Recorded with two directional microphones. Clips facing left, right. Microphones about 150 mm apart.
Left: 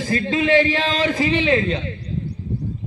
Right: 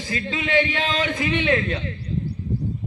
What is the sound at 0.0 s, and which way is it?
A man's voice, 40° left (ahead or behind).